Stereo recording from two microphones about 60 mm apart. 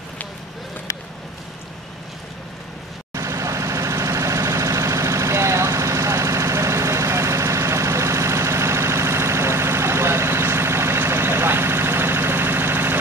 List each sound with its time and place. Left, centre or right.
3.2 s vehicle: right